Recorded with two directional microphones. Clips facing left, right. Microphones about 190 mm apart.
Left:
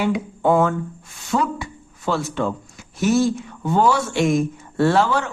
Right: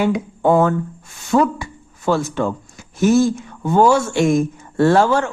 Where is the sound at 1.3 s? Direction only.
50° right (ahead or behind).